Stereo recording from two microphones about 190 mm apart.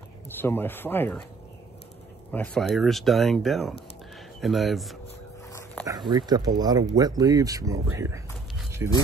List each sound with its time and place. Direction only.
0.4 s speech: 10° left (ahead or behind)
2.3 s speech: 5° left (ahead or behind)
5.9 s speech: 20° right (ahead or behind)